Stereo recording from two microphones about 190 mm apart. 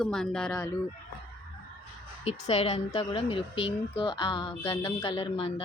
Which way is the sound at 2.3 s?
35° left (ahead or behind).